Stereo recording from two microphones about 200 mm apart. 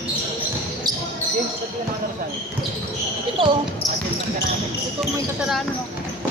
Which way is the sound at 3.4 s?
25° right (ahead or behind).